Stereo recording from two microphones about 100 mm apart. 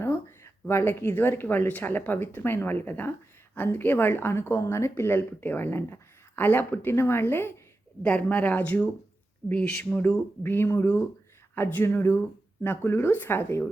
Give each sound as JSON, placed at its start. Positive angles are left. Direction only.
{"t": 0.0, "sound": "speech", "side_deg": 25}